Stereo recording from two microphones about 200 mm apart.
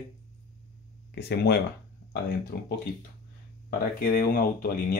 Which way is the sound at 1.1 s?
55° left (ahead or behind).